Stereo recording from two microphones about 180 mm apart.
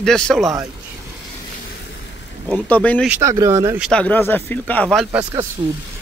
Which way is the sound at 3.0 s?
15° right (ahead or behind).